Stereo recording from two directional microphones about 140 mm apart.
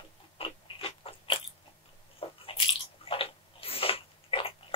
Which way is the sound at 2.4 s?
40° left (ahead or behind).